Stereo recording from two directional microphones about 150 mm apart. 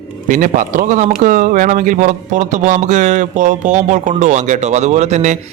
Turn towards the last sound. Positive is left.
turn(degrees=-50)  # may be behind; listen again after turning